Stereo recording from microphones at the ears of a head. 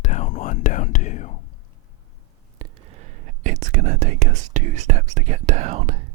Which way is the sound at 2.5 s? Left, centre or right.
Right.